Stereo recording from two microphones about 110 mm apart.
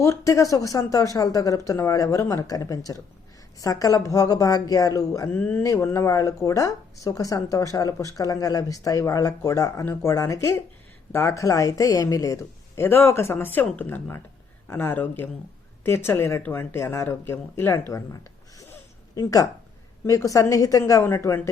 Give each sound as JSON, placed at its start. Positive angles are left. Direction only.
{"t": 0.0, "sound": "speech", "side_deg": 30}